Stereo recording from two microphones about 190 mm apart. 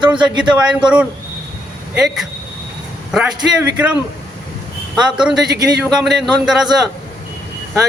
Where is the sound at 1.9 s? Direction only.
Centre (ahead or behind).